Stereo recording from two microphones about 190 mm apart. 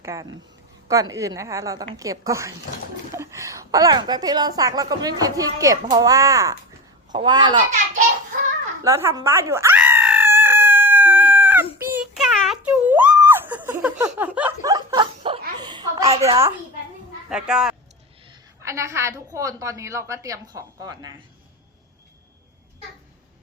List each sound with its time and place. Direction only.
0.0 s a woman's voice: 15° right (ahead or behind)
8.8 s screaming: 15° right (ahead or behind)
11.9 s giggle: centre (ahead or behind)
14.0 s laughter: 10° right (ahead or behind)
14.6 s chuckle: 20° right (ahead or behind)
16.2 s a child's voice: 15° right (ahead or behind)
17.2 s speech: 5° right (ahead or behind)
18.3 s a woman's voice: 15° right (ahead or behind)